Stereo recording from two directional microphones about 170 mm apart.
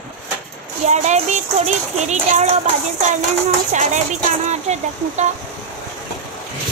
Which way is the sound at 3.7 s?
45° right (ahead or behind).